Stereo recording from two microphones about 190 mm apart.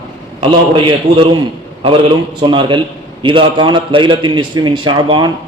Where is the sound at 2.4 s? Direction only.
25° right (ahead or behind).